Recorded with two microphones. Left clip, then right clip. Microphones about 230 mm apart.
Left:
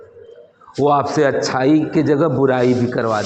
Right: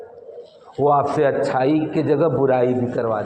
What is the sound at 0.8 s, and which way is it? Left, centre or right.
A man's voice, left.